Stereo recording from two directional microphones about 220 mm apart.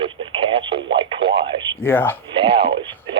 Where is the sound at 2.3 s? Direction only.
25° right (ahead or behind).